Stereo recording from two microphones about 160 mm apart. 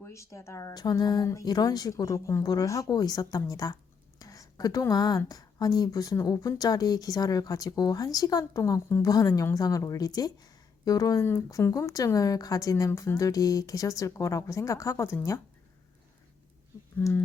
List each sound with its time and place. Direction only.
0.0 s speech: 20° left (ahead or behind)
17.0 s speech: 15° left (ahead or behind)